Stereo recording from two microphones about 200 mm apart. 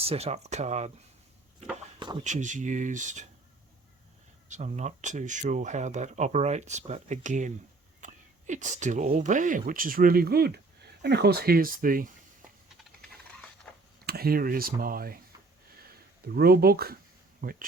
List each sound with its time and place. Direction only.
0.0 s speech: 30° right (ahead or behind)
2.2 s speech: 40° right (ahead or behind)
4.4 s speech: 35° right (ahead or behind)
13.7 s a sound: 5° left (ahead or behind)
14.0 s speech: 50° right (ahead or behind)